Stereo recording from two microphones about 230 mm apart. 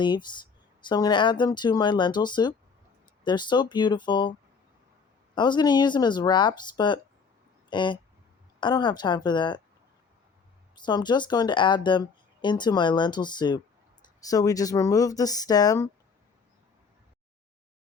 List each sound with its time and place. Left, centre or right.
0.0 s speech: centre
10.8 s speech: centre